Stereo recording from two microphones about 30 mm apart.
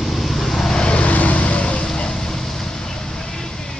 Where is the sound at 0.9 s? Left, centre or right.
Left.